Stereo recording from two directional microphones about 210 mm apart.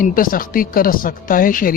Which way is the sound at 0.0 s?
40° left (ahead or behind).